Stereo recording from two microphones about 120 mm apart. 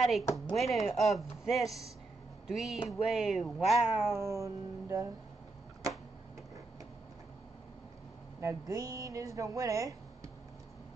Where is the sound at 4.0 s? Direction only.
20° right (ahead or behind).